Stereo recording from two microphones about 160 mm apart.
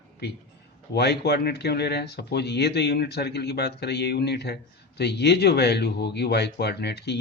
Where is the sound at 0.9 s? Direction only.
90° left.